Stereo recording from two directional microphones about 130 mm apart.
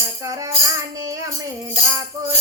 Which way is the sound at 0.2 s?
25° right (ahead or behind).